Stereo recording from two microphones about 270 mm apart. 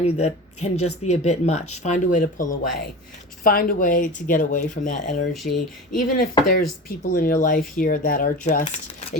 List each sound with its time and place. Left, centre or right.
0.0 s speech: left
5.3 s speech: centre
6.0 s speech: left